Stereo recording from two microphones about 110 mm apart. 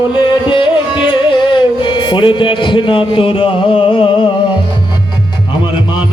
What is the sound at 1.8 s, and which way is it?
Speech, 45° left (ahead or behind).